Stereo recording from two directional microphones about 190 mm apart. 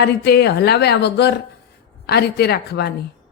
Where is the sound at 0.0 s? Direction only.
60° left (ahead or behind).